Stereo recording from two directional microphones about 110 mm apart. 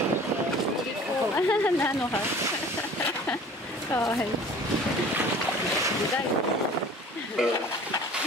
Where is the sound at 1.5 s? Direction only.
20° left (ahead or behind).